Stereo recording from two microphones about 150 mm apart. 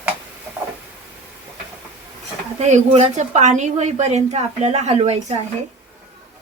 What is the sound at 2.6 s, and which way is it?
A woman's voice, 50° right (ahead or behind).